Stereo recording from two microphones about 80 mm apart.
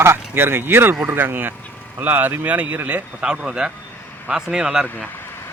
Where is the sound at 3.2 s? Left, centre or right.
Centre.